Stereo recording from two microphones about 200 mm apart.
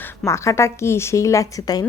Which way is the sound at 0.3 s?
15° left (ahead or behind).